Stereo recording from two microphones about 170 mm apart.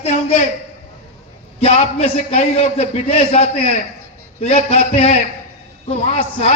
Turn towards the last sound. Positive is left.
turn(degrees=40)  # may be behind; listen again after turning